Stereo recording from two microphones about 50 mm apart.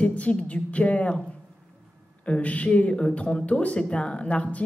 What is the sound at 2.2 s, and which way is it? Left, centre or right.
Speech, left.